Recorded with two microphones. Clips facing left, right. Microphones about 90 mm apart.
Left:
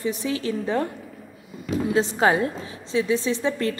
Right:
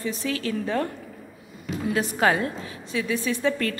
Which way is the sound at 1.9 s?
25° left (ahead or behind).